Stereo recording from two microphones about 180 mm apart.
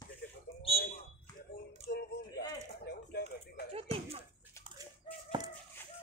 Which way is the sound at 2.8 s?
60° left (ahead or behind).